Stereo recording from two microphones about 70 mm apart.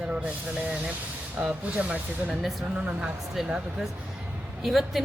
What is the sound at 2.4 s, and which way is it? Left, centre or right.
Speech, centre.